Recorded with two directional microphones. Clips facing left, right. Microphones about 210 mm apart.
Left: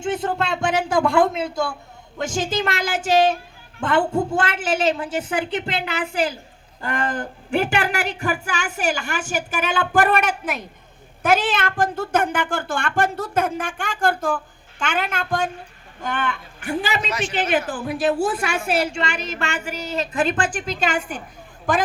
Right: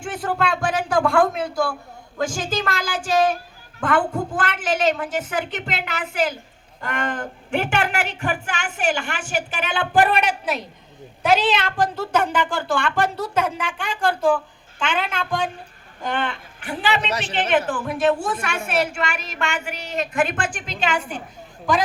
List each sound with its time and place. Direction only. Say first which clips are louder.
0.0 s a woman's voice: left 1 dB; 25° left (ahead or behind); by 17.0 s 45° left (ahead or behind)
17.1 s a woman's voice: left 1 dB; 35° right (ahead or behind)
17.7 s a woman's voice: right 1 dB; 35° left (ahead or behind)